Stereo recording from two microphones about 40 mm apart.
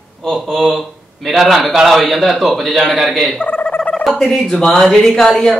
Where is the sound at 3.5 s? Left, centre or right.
Left.